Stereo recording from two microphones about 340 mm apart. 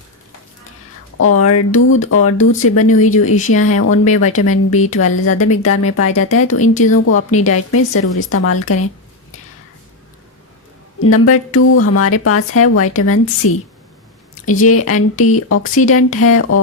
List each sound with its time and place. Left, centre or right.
1.2 s speech: left
6.6 s speech: left
6.9 s speech: left
11.0 s speech: left
14.7 s speech: left